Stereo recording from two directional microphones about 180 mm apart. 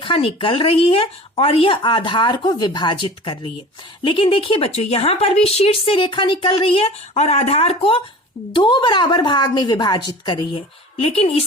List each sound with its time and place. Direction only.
0.0 s a woman's voice: 30° left (ahead or behind)